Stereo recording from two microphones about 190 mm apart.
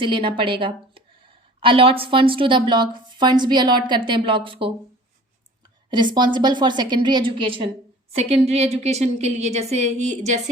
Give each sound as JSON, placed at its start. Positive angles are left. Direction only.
{"t": 0.0, "sound": "a woman's voice", "side_deg": -25}
{"t": 5.9, "sound": "a woman's voice", "side_deg": -25}